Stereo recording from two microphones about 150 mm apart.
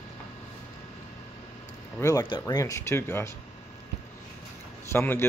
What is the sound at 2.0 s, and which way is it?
Speech, 20° left (ahead or behind).